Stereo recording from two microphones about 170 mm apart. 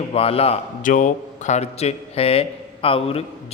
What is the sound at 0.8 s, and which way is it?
Speech, 50° left (ahead or behind).